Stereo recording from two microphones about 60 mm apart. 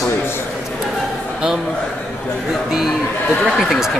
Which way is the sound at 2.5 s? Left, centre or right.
Centre.